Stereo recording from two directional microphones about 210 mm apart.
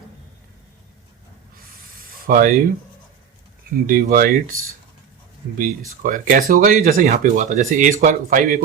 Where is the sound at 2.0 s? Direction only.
40° right (ahead or behind).